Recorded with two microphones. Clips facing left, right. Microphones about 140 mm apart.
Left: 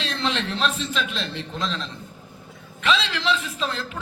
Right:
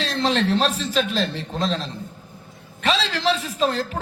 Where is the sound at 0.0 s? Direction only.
35° right (ahead or behind).